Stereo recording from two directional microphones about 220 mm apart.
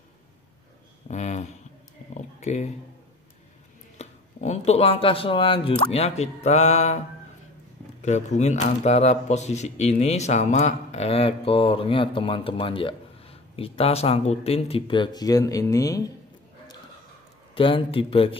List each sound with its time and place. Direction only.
1.0 s speech: 30° left (ahead or behind)
2.1 s a sound: 30° left (ahead or behind)
4.0 s speech: 30° left (ahead or behind)
8.0 s speech: 30° left (ahead or behind); by 16.0 s 15° left (ahead or behind)
17.6 s speech: 25° left (ahead or behind)